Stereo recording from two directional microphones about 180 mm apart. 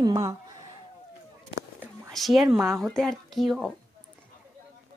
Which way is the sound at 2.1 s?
Centre (ahead or behind).